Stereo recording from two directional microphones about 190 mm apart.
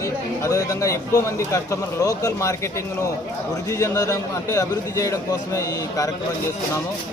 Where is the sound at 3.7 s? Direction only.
15° left (ahead or behind).